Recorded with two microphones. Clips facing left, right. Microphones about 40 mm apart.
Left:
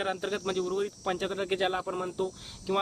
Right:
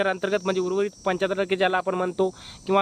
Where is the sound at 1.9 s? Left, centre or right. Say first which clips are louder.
Right 8 dB; right.